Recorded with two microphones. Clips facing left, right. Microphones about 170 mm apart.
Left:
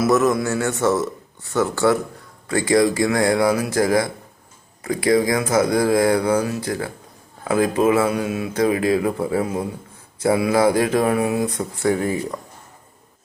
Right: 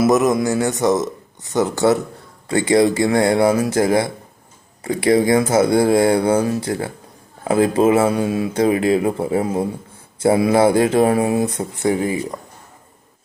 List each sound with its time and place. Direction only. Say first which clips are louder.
0.0 s speech: right 2 dB; 20° right (ahead or behind)